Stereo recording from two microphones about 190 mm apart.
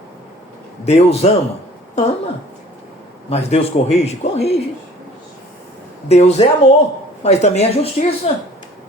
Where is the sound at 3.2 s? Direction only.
35° left (ahead or behind).